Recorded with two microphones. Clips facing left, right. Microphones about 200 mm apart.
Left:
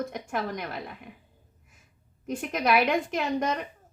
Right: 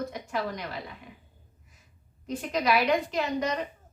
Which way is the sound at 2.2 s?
50° left (ahead or behind).